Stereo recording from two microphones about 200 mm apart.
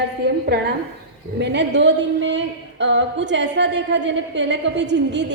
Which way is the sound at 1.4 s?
60° right (ahead or behind).